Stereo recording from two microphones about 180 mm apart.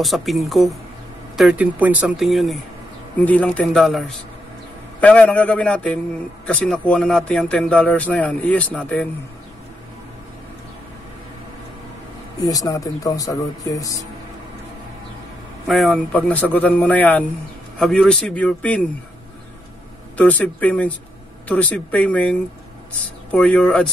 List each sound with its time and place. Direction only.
0.0 s speech: centre (ahead or behind)
12.4 s speech: 20° left (ahead or behind)
15.6 s speech: centre (ahead or behind)
20.2 s speech: 10° left (ahead or behind)